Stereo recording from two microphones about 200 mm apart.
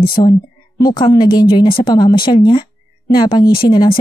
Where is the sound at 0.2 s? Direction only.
20° left (ahead or behind).